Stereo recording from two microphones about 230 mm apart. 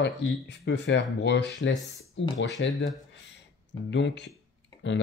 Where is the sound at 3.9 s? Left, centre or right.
Left.